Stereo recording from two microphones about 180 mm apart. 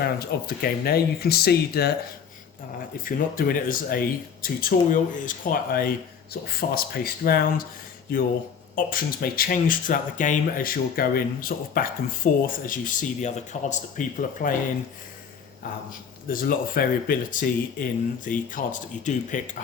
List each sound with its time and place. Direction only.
0.0 s speech: 55° left (ahead or behind)
3.0 s speech: 50° left (ahead or behind)
8.7 s speech: 55° left (ahead or behind)
16.3 s speech: 50° left (ahead or behind)